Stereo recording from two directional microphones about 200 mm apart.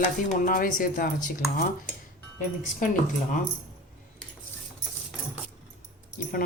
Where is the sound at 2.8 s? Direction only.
40° left (ahead or behind).